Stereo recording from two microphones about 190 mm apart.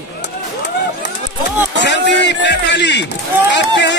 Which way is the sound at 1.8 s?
65° left (ahead or behind).